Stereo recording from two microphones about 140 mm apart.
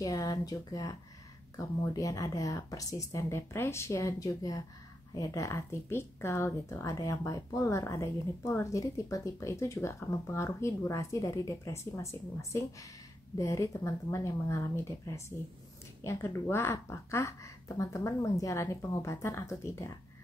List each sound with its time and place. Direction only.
0.0 s speech: 25° left (ahead or behind)